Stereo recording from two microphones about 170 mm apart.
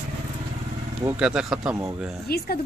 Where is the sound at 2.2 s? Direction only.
65° left (ahead or behind).